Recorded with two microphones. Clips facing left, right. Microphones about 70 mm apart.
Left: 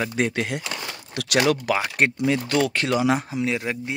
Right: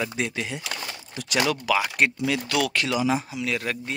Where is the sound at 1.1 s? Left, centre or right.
Left.